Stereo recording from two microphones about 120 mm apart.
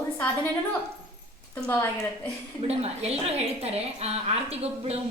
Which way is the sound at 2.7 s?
60° right (ahead or behind).